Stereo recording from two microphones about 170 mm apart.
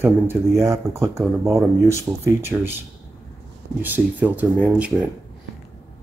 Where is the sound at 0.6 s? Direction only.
15° right (ahead or behind).